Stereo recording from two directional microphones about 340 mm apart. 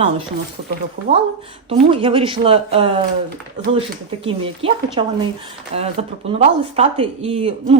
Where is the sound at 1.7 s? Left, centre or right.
Centre.